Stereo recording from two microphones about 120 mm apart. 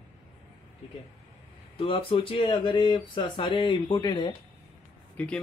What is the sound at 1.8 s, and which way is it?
Speech, 45° left (ahead or behind).